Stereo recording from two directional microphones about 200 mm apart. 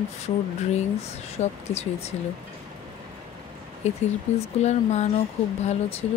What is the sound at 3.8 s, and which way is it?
Speech, 35° left (ahead or behind).